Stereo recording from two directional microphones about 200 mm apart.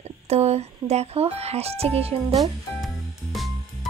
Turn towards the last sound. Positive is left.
turn(degrees=0)  # may be behind; listen again after turning